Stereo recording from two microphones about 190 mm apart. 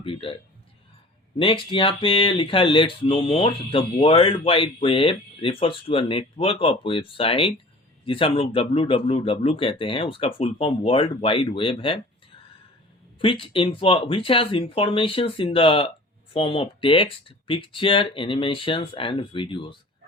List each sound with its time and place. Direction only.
0.0 s speech: 30° left (ahead or behind)
1.4 s speech: 25° left (ahead or behind)
13.1 s speech: 25° left (ahead or behind)